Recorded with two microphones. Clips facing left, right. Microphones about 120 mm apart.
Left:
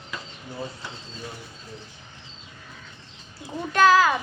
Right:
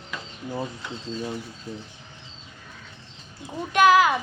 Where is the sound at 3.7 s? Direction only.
15° right (ahead or behind).